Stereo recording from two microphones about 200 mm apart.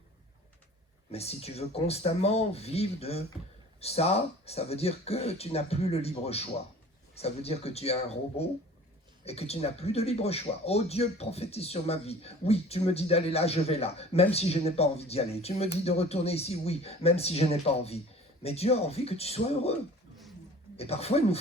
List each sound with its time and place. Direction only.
1.1 s speech: 30° left (ahead or behind)
20.7 s speech: 30° left (ahead or behind)